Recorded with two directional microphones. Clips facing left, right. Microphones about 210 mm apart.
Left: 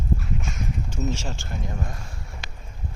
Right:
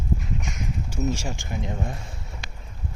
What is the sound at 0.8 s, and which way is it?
Speech, 10° right (ahead or behind).